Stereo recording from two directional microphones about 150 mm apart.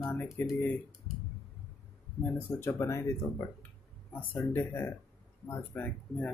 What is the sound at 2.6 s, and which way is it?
Speech, 15° left (ahead or behind).